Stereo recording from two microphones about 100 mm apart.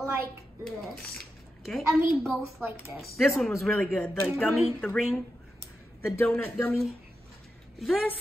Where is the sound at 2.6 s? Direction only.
20° right (ahead or behind).